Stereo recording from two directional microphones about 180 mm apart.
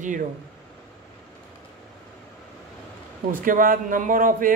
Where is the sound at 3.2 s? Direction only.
50° right (ahead or behind).